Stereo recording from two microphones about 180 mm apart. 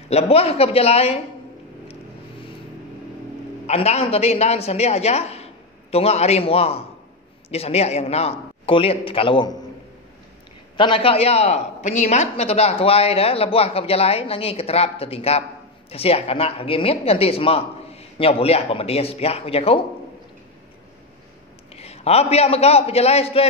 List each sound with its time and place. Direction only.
0.1 s a man's voice: 35° left (ahead or behind)
3.6 s a man's voice: 35° left (ahead or behind)
10.8 s a man's voice: 30° left (ahead or behind)
21.7 s a man's voice: 35° left (ahead or behind)